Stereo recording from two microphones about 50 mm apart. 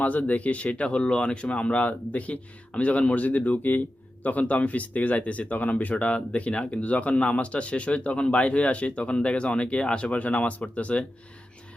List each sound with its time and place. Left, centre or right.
0.0 s speech: left